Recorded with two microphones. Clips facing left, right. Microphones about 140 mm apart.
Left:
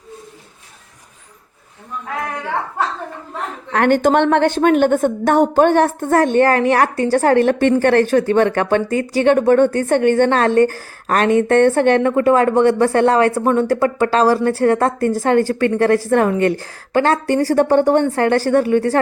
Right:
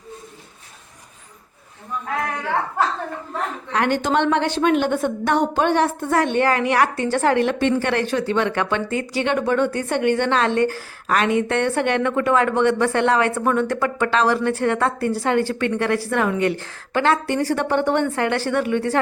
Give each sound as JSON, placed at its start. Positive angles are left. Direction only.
{"t": 3.7, "sound": "a woman's voice", "side_deg": 50}